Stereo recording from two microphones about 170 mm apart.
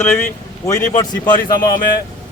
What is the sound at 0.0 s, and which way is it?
Speech, 10° left (ahead or behind).